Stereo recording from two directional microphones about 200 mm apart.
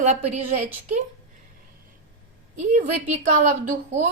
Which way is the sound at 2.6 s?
40° right (ahead or behind).